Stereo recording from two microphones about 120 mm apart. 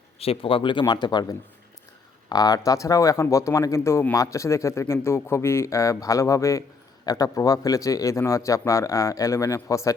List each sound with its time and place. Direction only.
0.2 s speech: 50° left (ahead or behind); by 9.9 s 25° left (ahead or behind)